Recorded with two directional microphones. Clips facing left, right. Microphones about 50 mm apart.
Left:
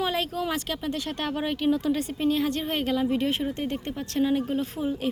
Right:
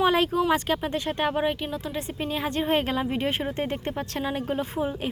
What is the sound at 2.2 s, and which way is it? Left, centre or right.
Speech, right.